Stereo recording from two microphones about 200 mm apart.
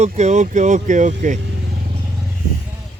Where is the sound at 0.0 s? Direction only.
35° right (ahead or behind).